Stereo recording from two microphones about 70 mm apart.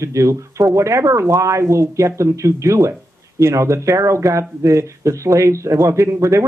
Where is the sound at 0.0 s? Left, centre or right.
Right.